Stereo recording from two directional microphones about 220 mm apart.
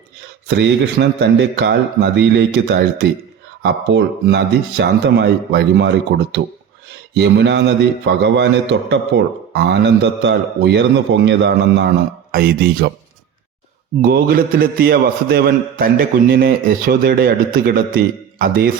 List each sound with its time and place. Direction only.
0.4 s a man's voice: 50° right (ahead or behind)
14.0 s a man's voice: 40° right (ahead or behind)